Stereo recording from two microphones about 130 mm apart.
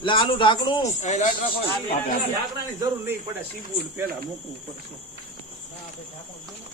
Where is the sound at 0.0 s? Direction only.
40° left (ahead or behind).